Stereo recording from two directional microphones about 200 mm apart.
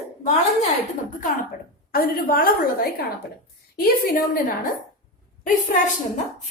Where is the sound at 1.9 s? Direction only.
50° left (ahead or behind).